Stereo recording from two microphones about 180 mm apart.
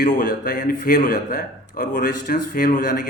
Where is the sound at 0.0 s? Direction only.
50° left (ahead or behind).